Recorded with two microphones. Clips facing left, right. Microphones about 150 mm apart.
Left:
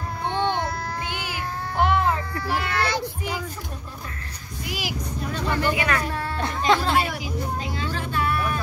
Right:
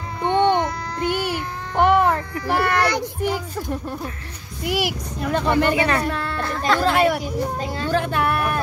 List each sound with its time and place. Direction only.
0.3 s babbling: 20° right (ahead or behind)
1.8 s a sound: 55° right (ahead or behind)
4.6 s speech: 65° right (ahead or behind)
5.8 s speech: 30° right (ahead or behind)
6.0 s speech: 65° right (ahead or behind); by 7.9 s 50° right (ahead or behind)
7.9 s speech: 65° right (ahead or behind)